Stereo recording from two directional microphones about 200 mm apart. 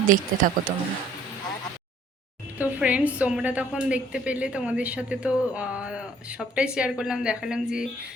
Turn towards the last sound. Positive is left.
turn(degrees=-5)  # may be behind; listen again after turning